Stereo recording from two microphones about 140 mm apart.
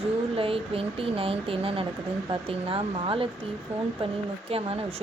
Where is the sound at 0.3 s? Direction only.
40° right (ahead or behind).